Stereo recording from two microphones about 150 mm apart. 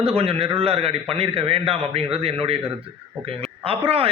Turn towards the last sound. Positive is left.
turn(degrees=-40)  # may be behind; listen again after turning